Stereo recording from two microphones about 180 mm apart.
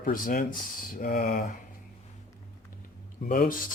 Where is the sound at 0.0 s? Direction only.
50° left (ahead or behind).